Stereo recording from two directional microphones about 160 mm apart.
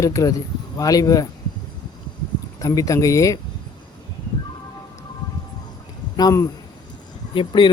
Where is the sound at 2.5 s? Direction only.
20° left (ahead or behind).